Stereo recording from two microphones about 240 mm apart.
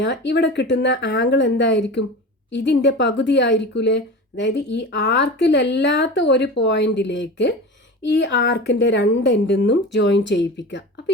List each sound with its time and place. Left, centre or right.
0.0 s speech: left